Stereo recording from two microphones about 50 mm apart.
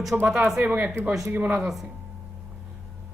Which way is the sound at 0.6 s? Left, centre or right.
Right.